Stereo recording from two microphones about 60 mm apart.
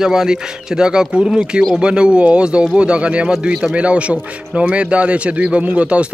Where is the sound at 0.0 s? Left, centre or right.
Centre.